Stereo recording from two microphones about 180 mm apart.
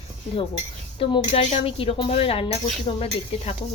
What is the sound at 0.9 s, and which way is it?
Speech, 30° left (ahead or behind).